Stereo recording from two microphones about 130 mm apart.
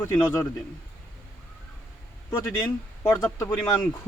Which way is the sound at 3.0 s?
25° left (ahead or behind).